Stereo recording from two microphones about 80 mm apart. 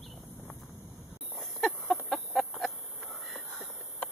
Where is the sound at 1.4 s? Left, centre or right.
Centre.